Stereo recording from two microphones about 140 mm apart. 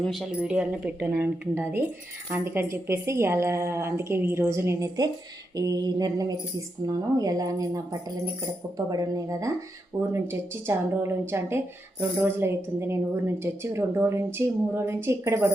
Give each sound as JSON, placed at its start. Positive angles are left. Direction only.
{"t": 0.0, "sound": "a woman's voice", "side_deg": 0}
{"t": 8.9, "sound": "a woman's voice", "side_deg": -25}